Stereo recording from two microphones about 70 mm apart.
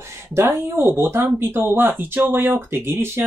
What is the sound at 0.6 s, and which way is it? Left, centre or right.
Speech, right.